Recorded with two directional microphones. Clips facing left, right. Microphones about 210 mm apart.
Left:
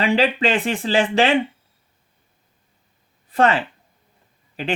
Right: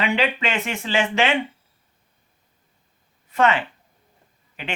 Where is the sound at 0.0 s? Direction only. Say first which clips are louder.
Left 4 dB; 35° left (ahead or behind).